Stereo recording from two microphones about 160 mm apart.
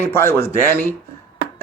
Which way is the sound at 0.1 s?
15° left (ahead or behind).